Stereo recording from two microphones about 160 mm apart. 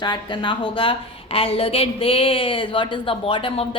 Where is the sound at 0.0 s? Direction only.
30° left (ahead or behind).